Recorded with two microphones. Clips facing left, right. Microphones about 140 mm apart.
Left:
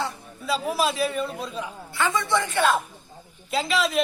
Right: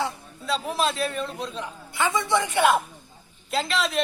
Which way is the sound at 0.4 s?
5° left (ahead or behind).